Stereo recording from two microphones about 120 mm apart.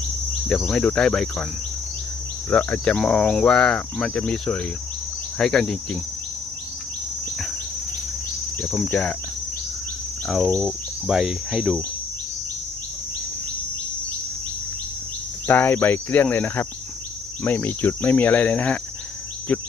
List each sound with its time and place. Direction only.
0.4 s cricket: 5° left (ahead or behind)
2.5 s cricket: 10° left (ahead or behind)
8.6 s cricket: centre (ahead or behind)
11.0 s cricket: 5° right (ahead or behind)
15.4 s cricket: 15° left (ahead or behind)